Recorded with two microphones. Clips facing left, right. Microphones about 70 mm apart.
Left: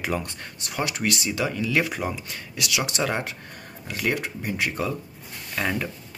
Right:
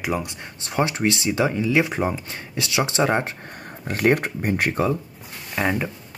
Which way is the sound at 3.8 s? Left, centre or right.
Right.